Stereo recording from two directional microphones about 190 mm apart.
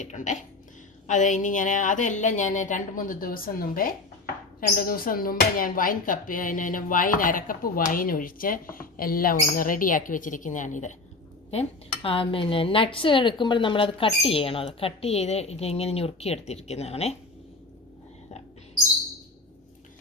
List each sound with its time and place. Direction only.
0.0 s a woman's voice: 40° left (ahead or behind)
12.0 s a woman's voice: 30° left (ahead or behind)